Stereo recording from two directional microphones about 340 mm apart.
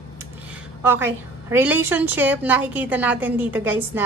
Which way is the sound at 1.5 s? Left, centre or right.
Centre.